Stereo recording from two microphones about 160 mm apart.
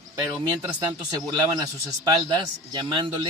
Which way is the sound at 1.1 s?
25° right (ahead or behind).